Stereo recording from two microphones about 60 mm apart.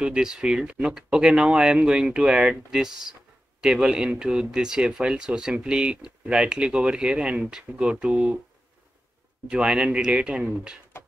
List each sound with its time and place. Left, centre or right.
0.0 s speech: centre
9.5 s speech: centre